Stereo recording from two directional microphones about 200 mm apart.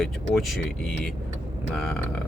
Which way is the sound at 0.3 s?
Centre (ahead or behind).